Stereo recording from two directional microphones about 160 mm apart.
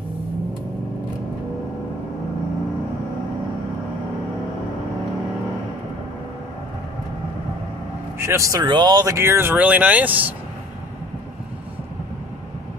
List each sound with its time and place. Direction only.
8.2 s speech: 20° right (ahead or behind)